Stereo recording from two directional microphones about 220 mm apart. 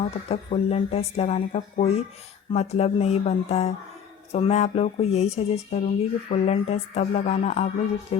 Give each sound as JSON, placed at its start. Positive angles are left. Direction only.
{"t": 0.3, "sound": "speech", "side_deg": 30}